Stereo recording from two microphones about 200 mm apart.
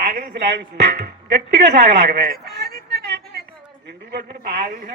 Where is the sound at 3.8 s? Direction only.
55° right (ahead or behind).